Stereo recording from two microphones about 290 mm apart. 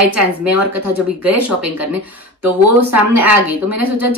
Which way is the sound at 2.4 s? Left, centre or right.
Right.